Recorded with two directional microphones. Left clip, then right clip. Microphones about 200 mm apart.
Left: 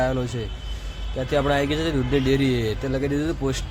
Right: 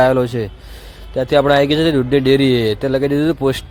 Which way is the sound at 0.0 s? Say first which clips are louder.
Right 11 dB; 35° right (ahead or behind).